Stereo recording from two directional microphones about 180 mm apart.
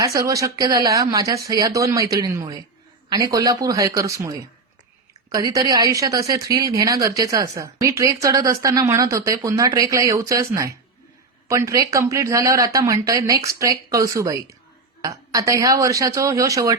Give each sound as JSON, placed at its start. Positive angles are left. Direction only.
{"t": 0.0, "sound": "a woman's voice", "side_deg": -20}